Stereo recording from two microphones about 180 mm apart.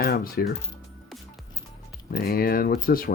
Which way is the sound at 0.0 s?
55° left (ahead or behind).